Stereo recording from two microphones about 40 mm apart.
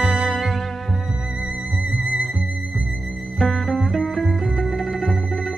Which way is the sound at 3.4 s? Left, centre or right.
Centre.